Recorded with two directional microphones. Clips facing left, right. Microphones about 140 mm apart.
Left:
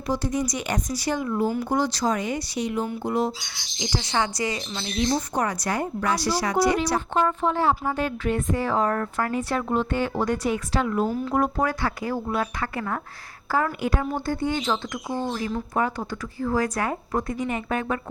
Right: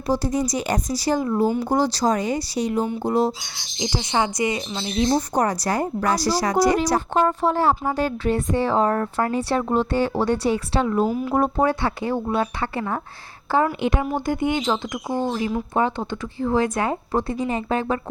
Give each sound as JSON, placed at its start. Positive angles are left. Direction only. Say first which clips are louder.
{"t": 0.1, "sound": "speech", "louder": "right 4 dB", "side_deg": -35}
{"t": 11.1, "sound": "speech", "louder": "right 3 dB", "side_deg": -15}
{"t": 11.3, "sound": "speech", "louder": "right 4 dB", "side_deg": -30}